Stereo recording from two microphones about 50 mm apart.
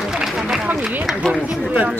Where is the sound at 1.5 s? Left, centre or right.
Right.